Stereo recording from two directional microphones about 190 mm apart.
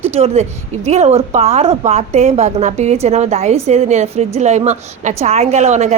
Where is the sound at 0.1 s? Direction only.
35° right (ahead or behind).